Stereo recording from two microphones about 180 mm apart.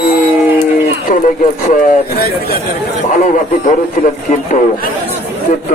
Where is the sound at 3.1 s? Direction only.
45° left (ahead or behind).